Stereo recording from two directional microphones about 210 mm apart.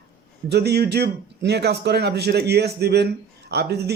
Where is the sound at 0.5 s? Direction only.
50° right (ahead or behind).